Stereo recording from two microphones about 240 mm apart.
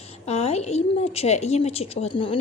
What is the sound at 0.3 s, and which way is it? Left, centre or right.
A woman's voice, left.